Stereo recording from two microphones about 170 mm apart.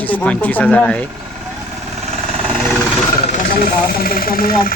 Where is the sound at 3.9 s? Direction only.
60° left (ahead or behind).